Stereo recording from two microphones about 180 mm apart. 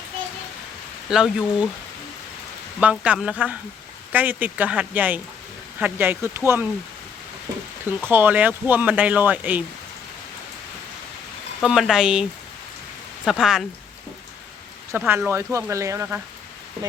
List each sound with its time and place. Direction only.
1.1 s speech: 5° right (ahead or behind)
2.8 s speech: 5° right (ahead or behind)
8.1 s speech: 10° right (ahead or behind)
11.6 s speech: centre (ahead or behind)
13.2 s speech: 5° right (ahead or behind)
14.9 s speech: 10° right (ahead or behind)